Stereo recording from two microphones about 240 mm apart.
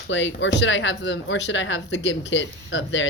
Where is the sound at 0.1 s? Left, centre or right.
Left.